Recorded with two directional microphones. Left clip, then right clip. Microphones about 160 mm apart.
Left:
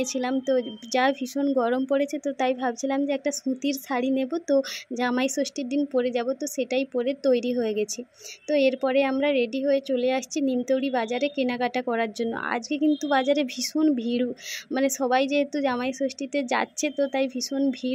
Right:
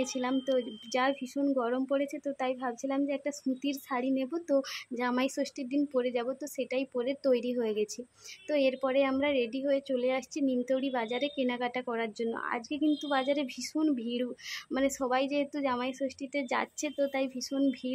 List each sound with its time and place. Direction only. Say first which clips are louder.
0.0 s a woman's voice: left 5 dB; 25° left (ahead or behind)